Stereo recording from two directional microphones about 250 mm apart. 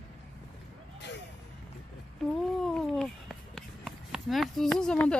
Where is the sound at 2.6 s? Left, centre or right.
Centre.